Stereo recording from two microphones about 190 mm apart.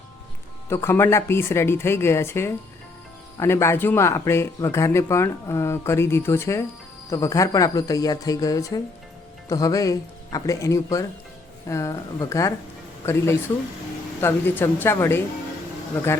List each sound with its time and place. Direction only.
0.7 s speech: 15° left (ahead or behind)
14.2 s speech: 10° left (ahead or behind)